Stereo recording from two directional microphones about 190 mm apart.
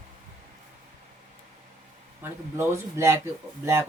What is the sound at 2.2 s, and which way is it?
Speech, 15° right (ahead or behind).